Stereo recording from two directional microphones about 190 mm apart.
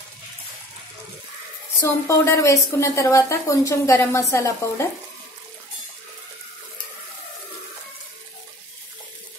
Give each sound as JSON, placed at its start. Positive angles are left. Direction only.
{"t": 1.8, "sound": "a woman's voice", "side_deg": 15}